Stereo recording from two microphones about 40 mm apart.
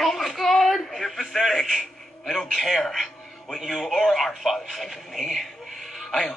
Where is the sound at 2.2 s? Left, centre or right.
Centre.